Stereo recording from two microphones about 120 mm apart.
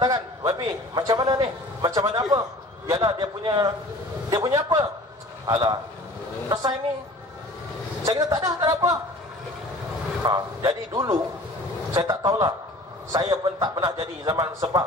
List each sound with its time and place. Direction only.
0.0 s a man's voice: 35° right (ahead or behind)
8.0 s speech: 30° right (ahead or behind)
10.2 s a man's voice: 30° right (ahead or behind)